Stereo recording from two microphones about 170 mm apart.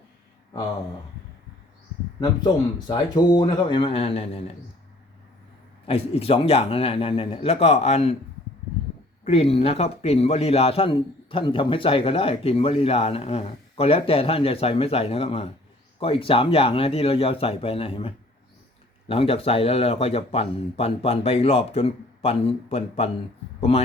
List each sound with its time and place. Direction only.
2.2 s speech: 25° left (ahead or behind)
5.8 s a man's voice: 35° left (ahead or behind)
9.2 s a man's voice: 35° left (ahead or behind)